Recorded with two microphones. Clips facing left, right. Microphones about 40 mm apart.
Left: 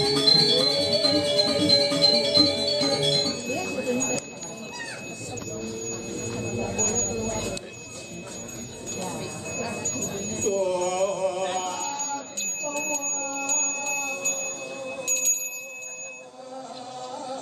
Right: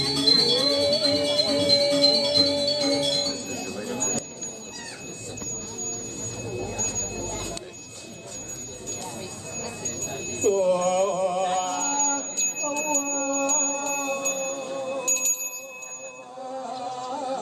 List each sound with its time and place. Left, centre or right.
0.0 s music: centre
6.8 s sine wave: left
7.2 s a sound: centre
10.4 s mantra: centre
11.4 s music: centre
12.2 s a sound: centre
12.8 s music: centre
14.0 s wind chime: centre
17.1 s music: right